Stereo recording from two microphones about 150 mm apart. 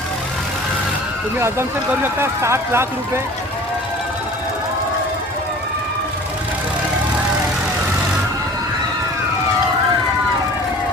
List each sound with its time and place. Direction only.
1.4 s speech: 15° right (ahead or behind)